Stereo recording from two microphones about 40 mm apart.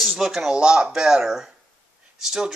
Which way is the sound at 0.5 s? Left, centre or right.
Right.